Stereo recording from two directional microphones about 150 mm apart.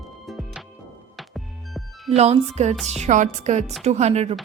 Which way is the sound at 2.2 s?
45° right (ahead or behind).